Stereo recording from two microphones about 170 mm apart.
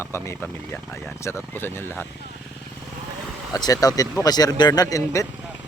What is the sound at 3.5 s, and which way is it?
Speech, 20° left (ahead or behind).